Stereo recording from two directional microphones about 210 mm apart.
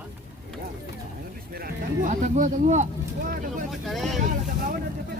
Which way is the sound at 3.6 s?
Centre (ahead or behind).